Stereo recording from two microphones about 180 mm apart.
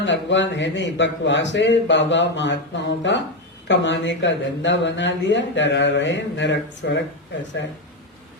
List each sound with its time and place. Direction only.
0.0 s speech: 85° left